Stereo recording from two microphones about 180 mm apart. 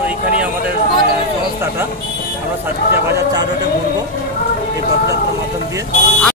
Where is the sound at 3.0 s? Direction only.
20° right (ahead or behind).